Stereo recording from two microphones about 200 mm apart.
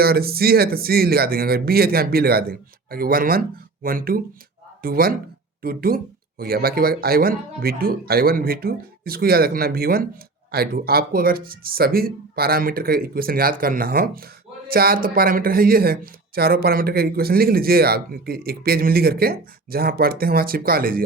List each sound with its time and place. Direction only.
0.0 s speech: 50° right (ahead or behind)